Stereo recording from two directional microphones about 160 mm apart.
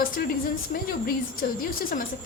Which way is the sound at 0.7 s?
55° left (ahead or behind).